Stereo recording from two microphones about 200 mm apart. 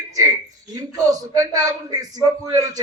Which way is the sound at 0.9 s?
15° right (ahead or behind).